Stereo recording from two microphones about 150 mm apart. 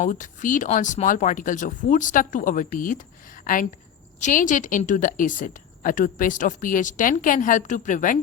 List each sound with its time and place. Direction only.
0.0 s a woman's voice: 60° left (ahead or behind)